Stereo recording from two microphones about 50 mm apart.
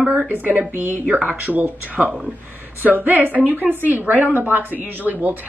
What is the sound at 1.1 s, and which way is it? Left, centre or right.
A woman's voice, right.